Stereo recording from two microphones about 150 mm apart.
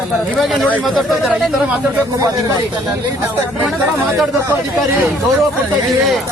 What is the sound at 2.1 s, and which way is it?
Speech, 25° right (ahead or behind).